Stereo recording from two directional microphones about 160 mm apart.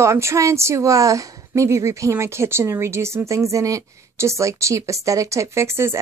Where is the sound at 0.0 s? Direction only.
15° right (ahead or behind).